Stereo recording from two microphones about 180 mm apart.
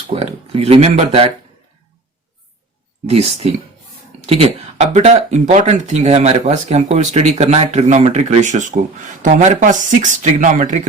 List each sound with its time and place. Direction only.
0.1 s speech: 35° right (ahead or behind)
3.1 s speech: 35° right (ahead or behind)